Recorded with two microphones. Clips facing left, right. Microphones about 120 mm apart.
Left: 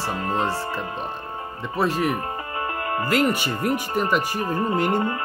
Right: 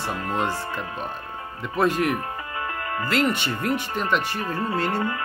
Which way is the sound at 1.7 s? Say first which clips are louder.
Right 1 dB; centre (ahead or behind).